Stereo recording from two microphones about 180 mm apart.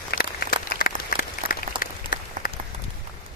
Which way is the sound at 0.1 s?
55° left (ahead or behind).